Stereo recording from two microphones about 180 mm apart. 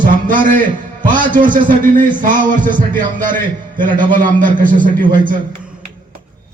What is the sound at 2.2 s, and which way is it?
Speech, 50° right (ahead or behind).